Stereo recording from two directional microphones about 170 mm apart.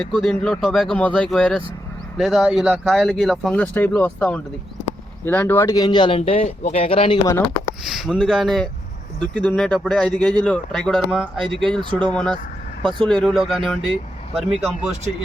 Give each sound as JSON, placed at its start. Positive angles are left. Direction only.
{"t": 0.0, "sound": "speech", "side_deg": 0}
{"t": 7.3, "sound": "speech", "side_deg": 15}
{"t": 7.9, "sound": "speech", "side_deg": -5}
{"t": 11.8, "sound": "speech", "side_deg": -30}
{"t": 12.1, "sound": "speech", "side_deg": 5}
{"t": 12.8, "sound": "speech", "side_deg": -30}
{"t": 13.1, "sound": "speech", "side_deg": 5}